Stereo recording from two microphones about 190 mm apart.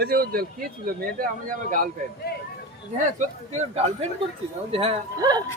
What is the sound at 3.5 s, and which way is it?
Speech, 35° right (ahead or behind).